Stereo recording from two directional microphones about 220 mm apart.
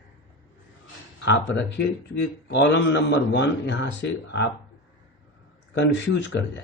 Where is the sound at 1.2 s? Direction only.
55° left (ahead or behind).